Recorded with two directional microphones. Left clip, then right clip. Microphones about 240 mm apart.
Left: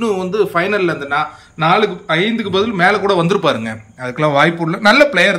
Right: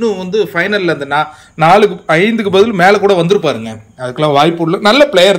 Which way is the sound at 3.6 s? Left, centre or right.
Left.